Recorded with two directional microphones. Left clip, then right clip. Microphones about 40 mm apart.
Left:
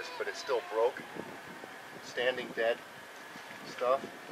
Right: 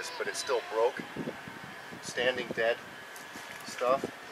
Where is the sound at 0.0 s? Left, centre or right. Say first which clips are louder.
Right 3 dB; right.